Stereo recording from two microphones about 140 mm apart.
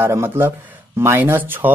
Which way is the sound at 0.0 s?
15° right (ahead or behind).